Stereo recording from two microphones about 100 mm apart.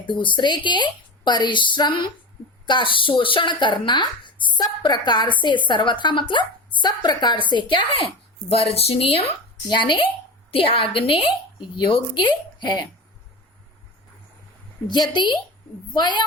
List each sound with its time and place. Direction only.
0.0 s speech: 55° left (ahead or behind)
8.4 s speech: 80° left
9.6 s speech: 50° left (ahead or behind)
10.5 s a woman's voice: 60° left (ahead or behind)
11.8 s speech: 50° left (ahead or behind)
14.8 s speech: 45° left (ahead or behind)